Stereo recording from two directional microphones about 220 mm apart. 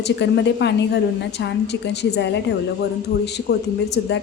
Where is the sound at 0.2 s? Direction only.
50° left (ahead or behind).